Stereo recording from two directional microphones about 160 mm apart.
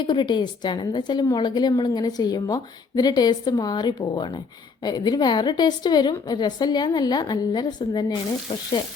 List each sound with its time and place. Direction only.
0.1 s a woman's voice: 30° left (ahead or behind)